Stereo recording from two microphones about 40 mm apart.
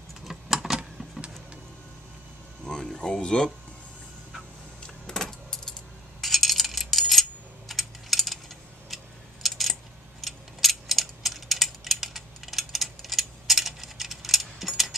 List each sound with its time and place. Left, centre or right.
0.2 s typing: centre
2.6 s speech: centre
5.0 s keys jangling: centre
6.2 s coin: centre
10.2 s a sound: centre